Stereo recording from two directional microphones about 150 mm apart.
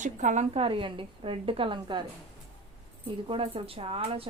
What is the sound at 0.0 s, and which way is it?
Speech, 55° right (ahead or behind).